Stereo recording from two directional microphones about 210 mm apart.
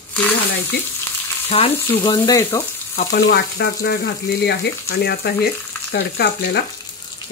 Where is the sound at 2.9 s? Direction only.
35° left (ahead or behind).